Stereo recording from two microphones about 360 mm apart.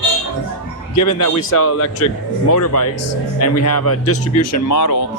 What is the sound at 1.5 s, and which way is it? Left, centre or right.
Speech, left.